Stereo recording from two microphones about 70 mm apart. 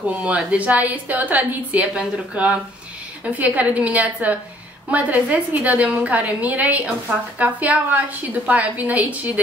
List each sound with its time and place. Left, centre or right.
0.0 s a woman's voice: centre